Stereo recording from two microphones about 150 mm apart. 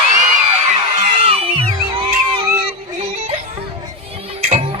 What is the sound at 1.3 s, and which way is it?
Music, 40° right (ahead or behind).